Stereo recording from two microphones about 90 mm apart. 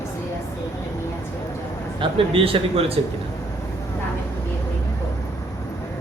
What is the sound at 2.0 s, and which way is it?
Speech, 90° right.